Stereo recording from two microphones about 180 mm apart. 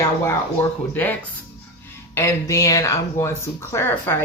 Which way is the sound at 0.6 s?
10° left (ahead or behind).